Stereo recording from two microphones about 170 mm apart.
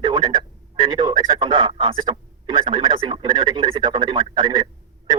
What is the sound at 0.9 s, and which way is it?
Speech, 30° right (ahead or behind).